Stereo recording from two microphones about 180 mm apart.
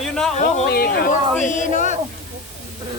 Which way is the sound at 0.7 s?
55° left (ahead or behind).